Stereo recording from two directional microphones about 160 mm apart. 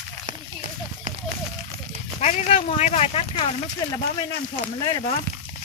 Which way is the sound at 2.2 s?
45° left (ahead or behind).